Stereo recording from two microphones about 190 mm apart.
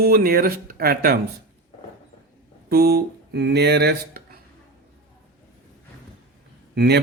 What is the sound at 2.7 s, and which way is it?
Speech, 55° right (ahead or behind).